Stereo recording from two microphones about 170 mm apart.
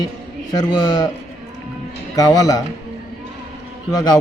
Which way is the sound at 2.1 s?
20° left (ahead or behind).